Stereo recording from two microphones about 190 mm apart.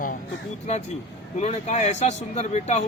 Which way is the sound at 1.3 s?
35° left (ahead or behind).